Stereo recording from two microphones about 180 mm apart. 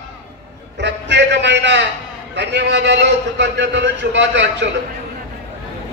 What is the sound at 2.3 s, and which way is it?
A man's voice, 75° right (ahead or behind).